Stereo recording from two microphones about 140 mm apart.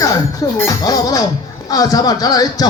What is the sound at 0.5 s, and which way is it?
Speech, 25° left (ahead or behind).